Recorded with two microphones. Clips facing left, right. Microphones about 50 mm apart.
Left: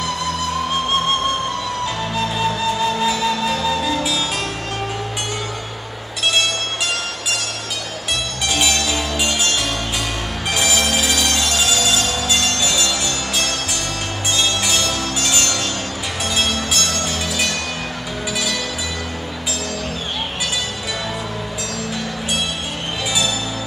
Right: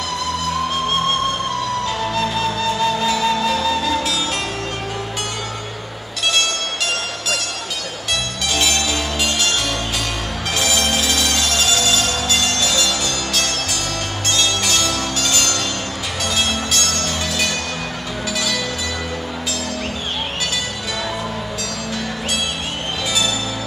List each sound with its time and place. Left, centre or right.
2.1 s music: centre
8.5 s music: centre
10.5 s music: centre
16.9 s music: centre